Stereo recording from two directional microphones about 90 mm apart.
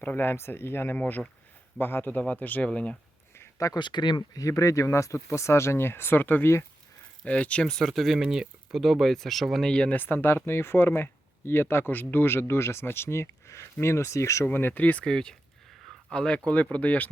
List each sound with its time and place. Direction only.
0.0 s speech: 20° left (ahead or behind)
3.3 s a sound: 35° left (ahead or behind)
3.8 s speech: 55° left (ahead or behind)
4.4 s speech: 35° left (ahead or behind); by 10.0 s 10° left (ahead or behind)
10.0 s speech: 20° left (ahead or behind)
14.4 s speech: 20° left (ahead or behind)